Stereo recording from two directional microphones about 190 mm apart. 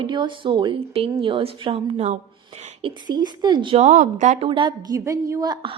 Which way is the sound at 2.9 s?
20° right (ahead or behind).